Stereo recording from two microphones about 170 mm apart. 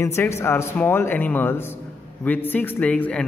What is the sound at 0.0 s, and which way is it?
A man's voice, 15° left (ahead or behind).